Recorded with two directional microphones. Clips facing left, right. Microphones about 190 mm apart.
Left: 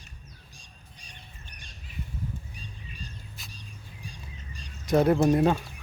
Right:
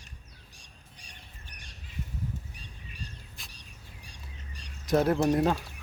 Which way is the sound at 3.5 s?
70° right (ahead or behind).